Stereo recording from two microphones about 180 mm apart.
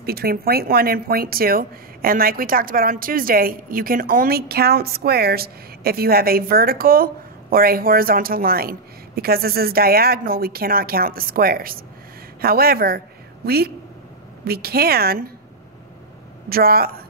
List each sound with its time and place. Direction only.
0.0 s speech: 60° right (ahead or behind)
14.4 s speech: 60° right (ahead or behind)
16.4 s speech: 55° right (ahead or behind)